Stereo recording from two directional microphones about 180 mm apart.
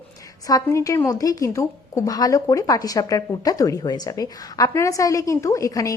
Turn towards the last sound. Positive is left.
turn(degrees=20)  # may be behind; listen again after turning